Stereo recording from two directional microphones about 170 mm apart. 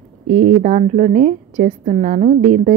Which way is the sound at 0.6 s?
45° right (ahead or behind).